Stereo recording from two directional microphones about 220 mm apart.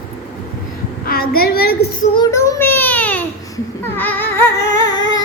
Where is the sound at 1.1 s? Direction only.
45° left (ahead or behind).